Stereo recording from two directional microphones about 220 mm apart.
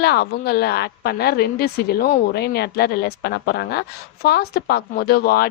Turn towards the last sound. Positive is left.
turn(degrees=45)  # may be behind; listen again after turning